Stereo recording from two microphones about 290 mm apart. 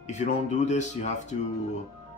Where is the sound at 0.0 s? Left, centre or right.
Left.